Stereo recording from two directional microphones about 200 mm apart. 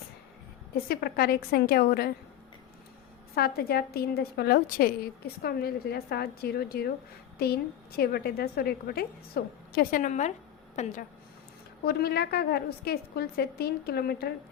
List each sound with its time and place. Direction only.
0.9 s a woman's voice: 50° left (ahead or behind)
3.3 s a woman's voice: 50° left (ahead or behind); by 10.9 s 35° left (ahead or behind)
11.9 s a woman's voice: 50° left (ahead or behind)